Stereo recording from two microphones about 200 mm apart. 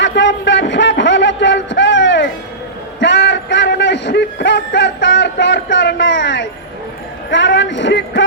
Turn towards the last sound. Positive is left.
turn(degrees=65)  # may be behind; listen again after turning